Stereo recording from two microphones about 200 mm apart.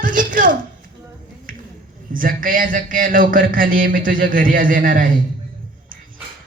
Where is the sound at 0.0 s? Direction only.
40° right (ahead or behind).